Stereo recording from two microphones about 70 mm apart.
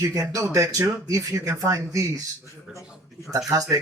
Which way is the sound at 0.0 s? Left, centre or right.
Right.